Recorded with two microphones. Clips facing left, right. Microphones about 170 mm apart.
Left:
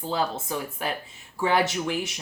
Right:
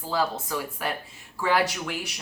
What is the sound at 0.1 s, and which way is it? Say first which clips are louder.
Speech: right 1 dB; 25° left (ahead or behind).